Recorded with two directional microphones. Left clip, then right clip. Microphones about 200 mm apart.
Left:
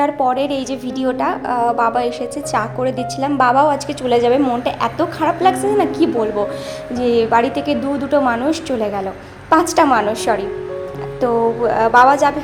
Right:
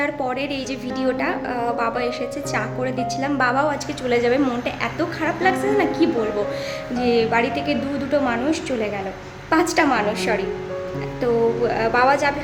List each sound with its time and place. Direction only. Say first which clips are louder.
0.0 s a woman's voice: left 7 dB; 15° left (ahead or behind)
11.7 s a woman's voice: left 10 dB; 15° left (ahead or behind)